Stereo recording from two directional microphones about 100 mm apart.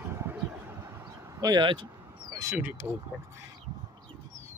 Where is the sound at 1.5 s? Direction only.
55° right (ahead or behind).